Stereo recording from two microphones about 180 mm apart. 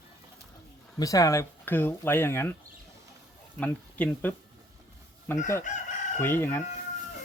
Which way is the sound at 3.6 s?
10° left (ahead or behind).